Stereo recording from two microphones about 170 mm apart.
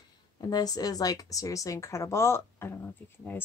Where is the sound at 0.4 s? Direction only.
20° left (ahead or behind).